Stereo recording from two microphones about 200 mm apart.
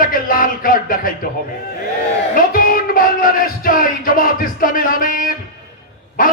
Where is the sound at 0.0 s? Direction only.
45° left (ahead or behind).